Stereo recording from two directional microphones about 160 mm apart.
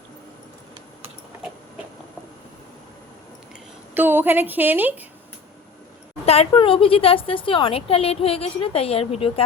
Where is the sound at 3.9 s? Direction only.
10° right (ahead or behind).